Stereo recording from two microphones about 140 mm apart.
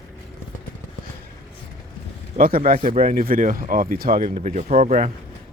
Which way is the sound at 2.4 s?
90° right.